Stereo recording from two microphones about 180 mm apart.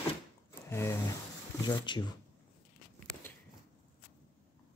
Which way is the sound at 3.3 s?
10° left (ahead or behind).